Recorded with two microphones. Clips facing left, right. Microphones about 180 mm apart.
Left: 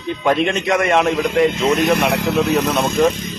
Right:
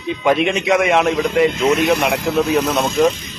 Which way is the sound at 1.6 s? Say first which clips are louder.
Right 1 dB; 35° left (ahead or behind).